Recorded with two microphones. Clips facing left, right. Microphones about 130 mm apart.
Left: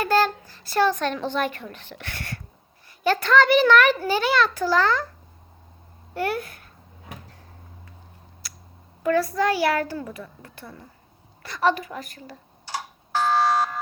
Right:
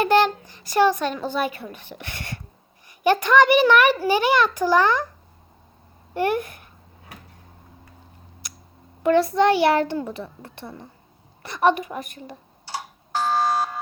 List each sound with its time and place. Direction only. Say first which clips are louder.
0.0 s speech: right 3 dB; 20° right (ahead or behind)
6.1 s speech: right 4 dB; 15° right (ahead or behind)
9.0 s a child's voice: right 4 dB; 25° right (ahead or behind)
11.4 s computer keyboard: right 3 dB; 20° right (ahead or behind)